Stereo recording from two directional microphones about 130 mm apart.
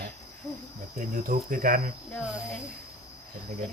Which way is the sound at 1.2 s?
90° right.